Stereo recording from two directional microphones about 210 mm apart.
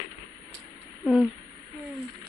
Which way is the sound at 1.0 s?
Centre (ahead or behind).